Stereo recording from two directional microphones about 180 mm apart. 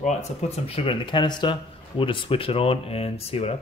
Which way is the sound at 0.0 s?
35° left (ahead or behind).